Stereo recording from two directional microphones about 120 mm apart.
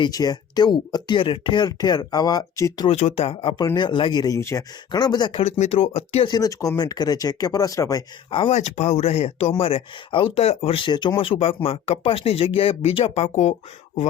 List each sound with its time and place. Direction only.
0.0 s speech: 35° left (ahead or behind)
3.2 s speech: 50° left (ahead or behind); by 5.4 s 35° left (ahead or behind)
5.4 s speech: 55° left (ahead or behind)
6.2 s speech: 35° left (ahead or behind)
8.3 s speech: 45° left (ahead or behind)
8.5 s speech: 75° left (ahead or behind); by 11.1 s 40° left (ahead or behind)
11.2 s speech: 50° left (ahead or behind)